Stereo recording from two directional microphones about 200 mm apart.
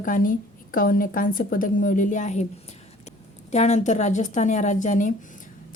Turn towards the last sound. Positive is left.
turn(degrees=40)  # may be behind; listen again after turning